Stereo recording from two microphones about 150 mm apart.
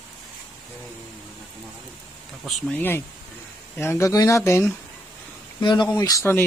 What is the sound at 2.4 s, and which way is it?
Speech, 10° left (ahead or behind).